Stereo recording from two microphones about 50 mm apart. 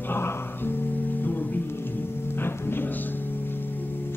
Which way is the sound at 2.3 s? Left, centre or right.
Left.